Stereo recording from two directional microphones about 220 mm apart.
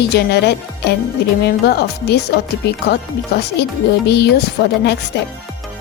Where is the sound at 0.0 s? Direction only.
50° left (ahead or behind).